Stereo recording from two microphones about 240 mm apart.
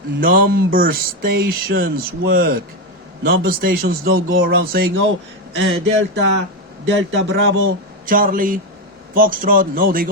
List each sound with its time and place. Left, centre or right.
0.2 s speech: right
5.5 s a sound: right
8.0 s speech: right